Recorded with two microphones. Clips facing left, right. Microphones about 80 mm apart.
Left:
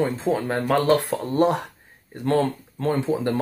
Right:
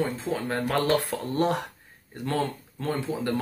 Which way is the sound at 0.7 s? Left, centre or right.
Left.